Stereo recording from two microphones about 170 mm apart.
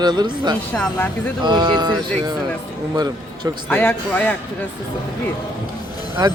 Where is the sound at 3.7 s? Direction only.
10° left (ahead or behind).